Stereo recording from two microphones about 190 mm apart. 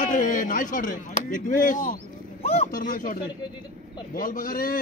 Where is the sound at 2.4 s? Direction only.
30° left (ahead or behind).